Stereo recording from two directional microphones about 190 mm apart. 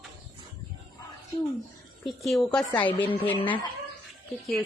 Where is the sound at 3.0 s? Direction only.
25° left (ahead or behind).